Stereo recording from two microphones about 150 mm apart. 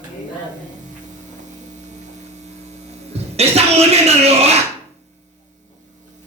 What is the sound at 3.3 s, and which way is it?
Speech, 45° right (ahead or behind).